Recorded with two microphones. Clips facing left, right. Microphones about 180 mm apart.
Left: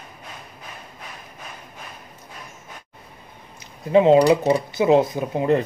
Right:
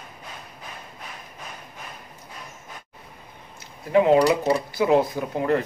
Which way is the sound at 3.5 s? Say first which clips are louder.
Left 3 dB; 25° left (ahead or behind).